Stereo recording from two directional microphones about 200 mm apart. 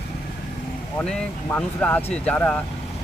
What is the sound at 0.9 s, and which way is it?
Speech, 10° left (ahead or behind).